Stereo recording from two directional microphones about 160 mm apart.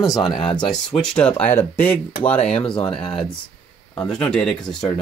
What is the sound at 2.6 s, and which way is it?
Speech, 30° left (ahead or behind).